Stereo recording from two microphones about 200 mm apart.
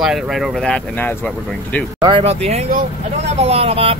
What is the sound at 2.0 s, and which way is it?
Speech, 25° right (ahead or behind).